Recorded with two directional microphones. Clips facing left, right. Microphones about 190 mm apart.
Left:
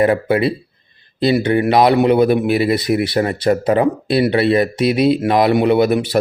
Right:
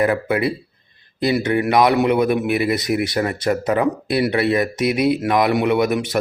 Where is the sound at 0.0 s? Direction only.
25° left (ahead or behind).